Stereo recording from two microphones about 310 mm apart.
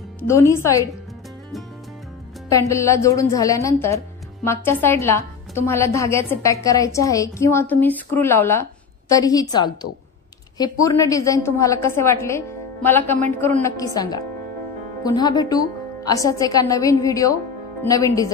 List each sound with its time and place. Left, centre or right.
0.3 s a woman's voice: centre
2.7 s a woman's voice: centre